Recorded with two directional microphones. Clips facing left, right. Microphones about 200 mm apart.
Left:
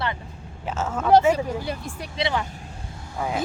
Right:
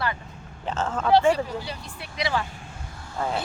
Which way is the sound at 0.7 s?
10° left (ahead or behind).